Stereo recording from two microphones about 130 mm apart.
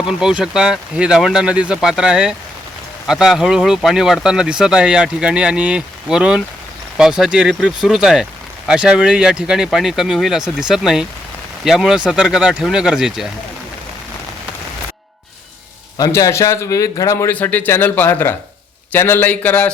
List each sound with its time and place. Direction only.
0.1 s speech: 5° right (ahead or behind)
16.0 s a man's voice: 30° left (ahead or behind); by 19.7 s 10° left (ahead or behind)